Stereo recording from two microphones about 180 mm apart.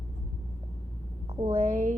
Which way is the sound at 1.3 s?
35° right (ahead or behind).